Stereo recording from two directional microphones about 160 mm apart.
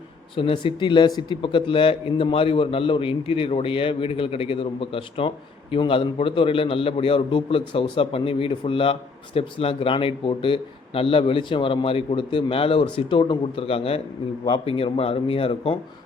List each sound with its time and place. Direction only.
0.3 s a man's voice: 35° left (ahead or behind)